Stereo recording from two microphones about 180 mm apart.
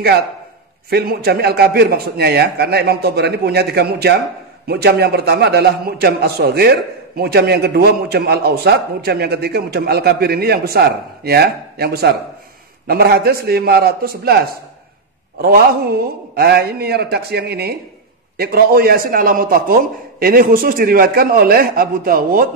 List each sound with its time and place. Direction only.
0.8 s a man's voice: 60° right (ahead or behind)
16.3 s a man's voice: 60° right (ahead or behind)